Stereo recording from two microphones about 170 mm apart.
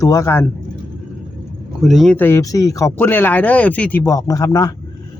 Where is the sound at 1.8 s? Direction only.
Centre (ahead or behind); by 4.8 s 20° left (ahead or behind).